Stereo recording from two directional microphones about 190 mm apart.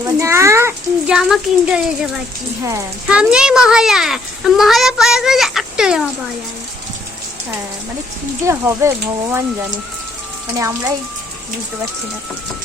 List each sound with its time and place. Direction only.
0.0 s a child's voice: 15° right (ahead or behind)
8.4 s speech: 15° right (ahead or behind)
10.6 s speech: 15° right (ahead or behind)